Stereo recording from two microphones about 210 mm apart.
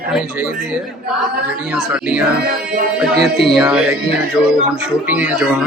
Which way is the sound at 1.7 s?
5° right (ahead or behind).